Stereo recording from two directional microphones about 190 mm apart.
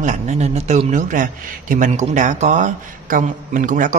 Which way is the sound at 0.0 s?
40° right (ahead or behind).